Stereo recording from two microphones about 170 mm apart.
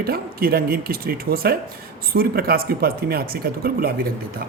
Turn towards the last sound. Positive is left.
turn(degrees=-65)  # may be behind; listen again after turning